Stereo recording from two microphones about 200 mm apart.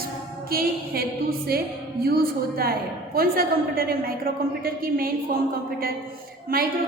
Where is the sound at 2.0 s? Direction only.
50° right (ahead or behind).